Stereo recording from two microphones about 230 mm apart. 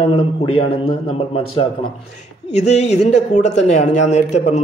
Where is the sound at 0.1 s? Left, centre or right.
Left.